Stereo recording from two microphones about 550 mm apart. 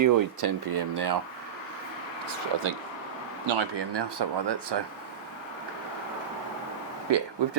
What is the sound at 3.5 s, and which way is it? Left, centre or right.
Speech, right.